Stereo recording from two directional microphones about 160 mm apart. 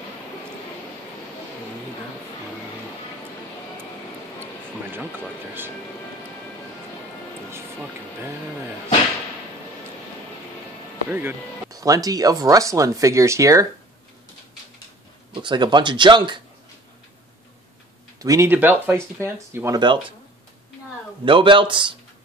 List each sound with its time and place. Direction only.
11.1 s speech: 15° right (ahead or behind)
15.3 s speech: 30° right (ahead or behind)
18.2 s speech: 20° right (ahead or behind)
19.8 s speech: 30° right (ahead or behind)
21.3 s speech: 30° right (ahead or behind)